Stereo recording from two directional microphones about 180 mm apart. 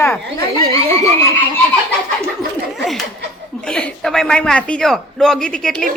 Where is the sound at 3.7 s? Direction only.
5° left (ahead or behind).